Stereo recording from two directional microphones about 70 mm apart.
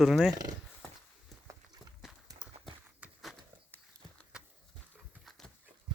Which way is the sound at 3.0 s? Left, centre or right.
Centre.